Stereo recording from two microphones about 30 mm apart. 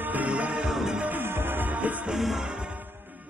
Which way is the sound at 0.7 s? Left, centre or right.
Centre.